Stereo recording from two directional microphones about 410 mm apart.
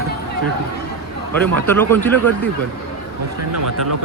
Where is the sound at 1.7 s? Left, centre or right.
Centre.